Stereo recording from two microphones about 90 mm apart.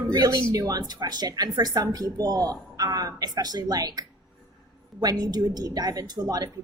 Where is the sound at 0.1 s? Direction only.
40° right (ahead or behind).